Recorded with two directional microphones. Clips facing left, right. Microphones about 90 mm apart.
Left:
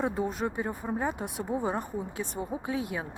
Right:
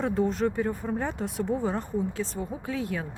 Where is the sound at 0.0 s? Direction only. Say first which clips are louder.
Right 4 dB; 10° left (ahead or behind).